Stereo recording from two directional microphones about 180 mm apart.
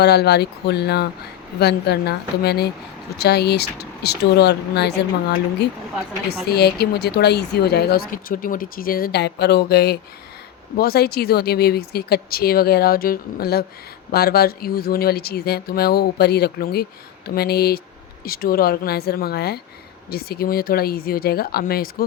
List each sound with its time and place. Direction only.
0.0 s speech: 65° left (ahead or behind)
6.4 s speech: 65° left (ahead or behind)